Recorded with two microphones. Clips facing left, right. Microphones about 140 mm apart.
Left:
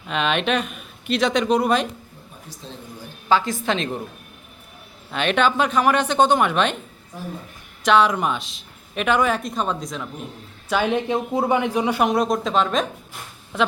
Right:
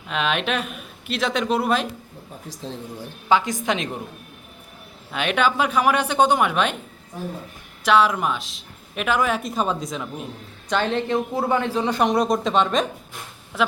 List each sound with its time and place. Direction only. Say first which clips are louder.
0.1 s speech: left 2 dB; centre (ahead or behind)
3.2 s a woman's voice: even; 15° right (ahead or behind)
5.1 s a woman's voice: left 2 dB; 5° right (ahead or behind)
7.9 s speech: left 1 dB; 5° right (ahead or behind)
10.7 s a man's voice: left 1 dB; 10° left (ahead or behind)